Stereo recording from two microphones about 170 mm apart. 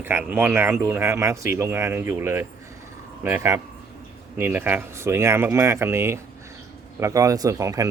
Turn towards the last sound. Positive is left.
turn(degrees=-20)  # may be behind; listen again after turning